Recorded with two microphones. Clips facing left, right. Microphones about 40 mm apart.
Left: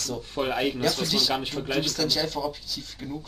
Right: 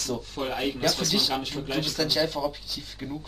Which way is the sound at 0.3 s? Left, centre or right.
Centre.